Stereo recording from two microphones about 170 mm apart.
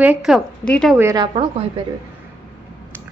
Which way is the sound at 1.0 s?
15° right (ahead or behind).